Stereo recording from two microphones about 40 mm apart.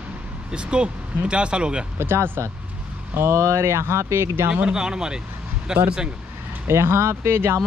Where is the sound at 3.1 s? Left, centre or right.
Right.